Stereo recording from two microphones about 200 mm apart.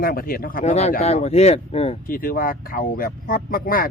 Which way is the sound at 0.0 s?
45° left (ahead or behind).